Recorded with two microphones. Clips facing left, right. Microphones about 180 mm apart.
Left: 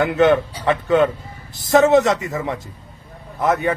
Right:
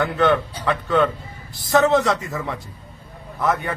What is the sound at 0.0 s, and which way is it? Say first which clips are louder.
A man's voice: left 4 dB; 20° left (ahead or behind).